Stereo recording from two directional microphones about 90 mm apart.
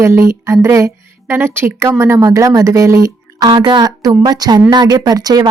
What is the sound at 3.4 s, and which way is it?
A woman's voice, 55° right (ahead or behind).